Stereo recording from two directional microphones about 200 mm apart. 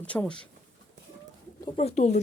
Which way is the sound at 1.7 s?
35° left (ahead or behind).